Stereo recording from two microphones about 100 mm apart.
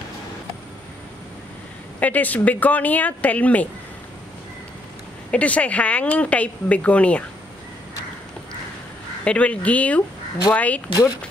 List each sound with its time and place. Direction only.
2.0 s speech: 15° left (ahead or behind)
5.3 s speech: 15° left (ahead or behind)
9.2 s speech: 10° left (ahead or behind)
10.9 s speech: 40° left (ahead or behind)